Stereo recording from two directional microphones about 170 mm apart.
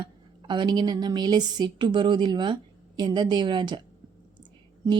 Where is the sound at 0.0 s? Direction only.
25° right (ahead or behind).